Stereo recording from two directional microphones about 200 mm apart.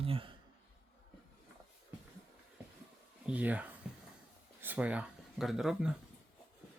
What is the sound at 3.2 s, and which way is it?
Speech, 5° right (ahead or behind).